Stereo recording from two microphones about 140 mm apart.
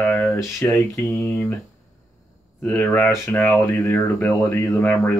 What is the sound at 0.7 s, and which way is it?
Mantra, 20° left (ahead or behind).